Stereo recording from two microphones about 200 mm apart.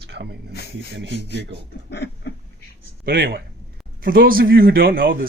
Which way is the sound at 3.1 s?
55° right (ahead or behind).